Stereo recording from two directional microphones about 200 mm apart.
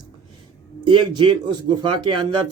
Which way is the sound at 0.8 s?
25° right (ahead or behind).